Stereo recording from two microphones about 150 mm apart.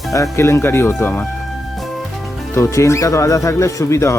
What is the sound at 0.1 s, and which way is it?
Speech, 20° left (ahead or behind).